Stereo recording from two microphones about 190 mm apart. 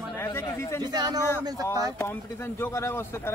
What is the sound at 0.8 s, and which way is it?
Speech, 20° right (ahead or behind).